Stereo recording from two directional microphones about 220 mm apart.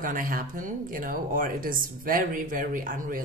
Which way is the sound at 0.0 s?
40° right (ahead or behind).